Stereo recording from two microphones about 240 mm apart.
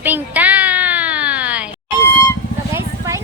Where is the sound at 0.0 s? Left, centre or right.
Centre.